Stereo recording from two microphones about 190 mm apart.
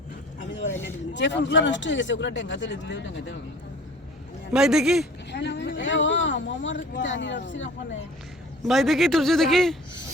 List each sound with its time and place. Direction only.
0.3 s a sound: 75° left (ahead or behind)
1.1 s speech: 70° left (ahead or behind)
4.5 s a man's voice: 5° right (ahead or behind)
5.3 s speech: 65° left (ahead or behind)
8.6 s a man's voice: centre (ahead or behind)